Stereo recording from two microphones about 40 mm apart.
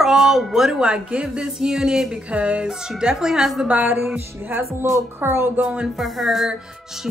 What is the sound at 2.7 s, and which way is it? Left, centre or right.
Speech, centre.